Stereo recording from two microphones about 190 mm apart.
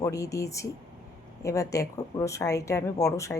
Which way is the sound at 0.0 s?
15° left (ahead or behind).